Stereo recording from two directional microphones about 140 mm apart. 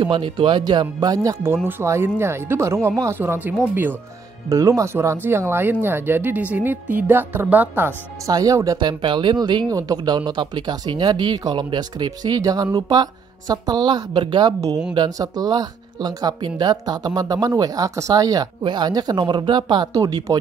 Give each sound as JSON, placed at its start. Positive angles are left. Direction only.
{"t": 0.0, "sound": "speech", "side_deg": -40}
{"t": 8.3, "sound": "speech", "side_deg": -25}